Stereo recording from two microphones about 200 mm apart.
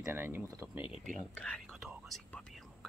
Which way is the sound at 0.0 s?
10° right (ahead or behind).